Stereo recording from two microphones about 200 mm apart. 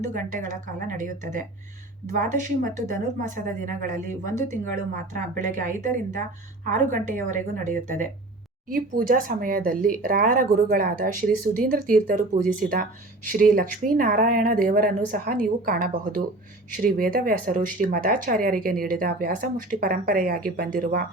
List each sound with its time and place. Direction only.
0.1 s a woman's voice: 40° right (ahead or behind)
5.1 s a woman's voice: 40° right (ahead or behind)